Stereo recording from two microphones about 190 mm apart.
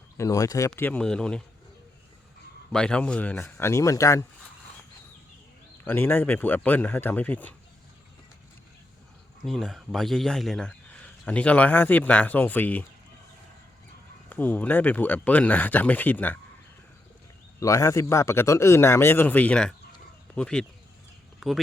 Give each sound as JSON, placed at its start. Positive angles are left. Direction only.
{"t": 0.2, "sound": "speech", "side_deg": 15}
{"t": 2.7, "sound": "speech", "side_deg": 5}
{"t": 5.8, "sound": "speech", "side_deg": 10}
{"t": 9.4, "sound": "speech", "side_deg": 0}
{"t": 14.3, "sound": "speech", "side_deg": 10}
{"t": 17.6, "sound": "speech", "side_deg": 15}